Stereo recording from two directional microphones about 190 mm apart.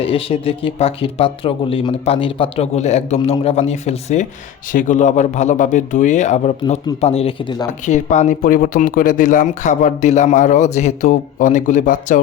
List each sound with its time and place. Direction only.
0.0 s speech: 30° left (ahead or behind)